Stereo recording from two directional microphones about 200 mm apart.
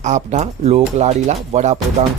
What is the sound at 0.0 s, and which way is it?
Speech, 35° right (ahead or behind).